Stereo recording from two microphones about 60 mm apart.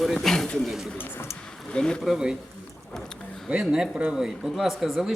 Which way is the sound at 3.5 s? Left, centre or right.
Centre.